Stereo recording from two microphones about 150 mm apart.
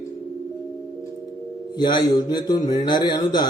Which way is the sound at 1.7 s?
30° left (ahead or behind).